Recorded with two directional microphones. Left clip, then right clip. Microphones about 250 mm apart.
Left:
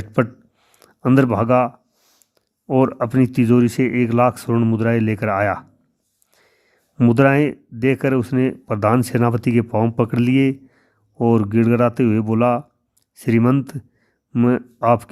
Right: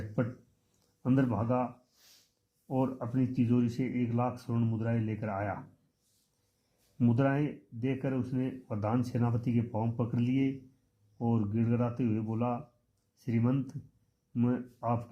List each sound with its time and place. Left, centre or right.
0.8 s speech: left
7.0 s speech: left